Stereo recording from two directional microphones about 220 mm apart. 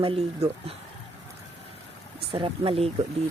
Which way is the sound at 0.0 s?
25° right (ahead or behind).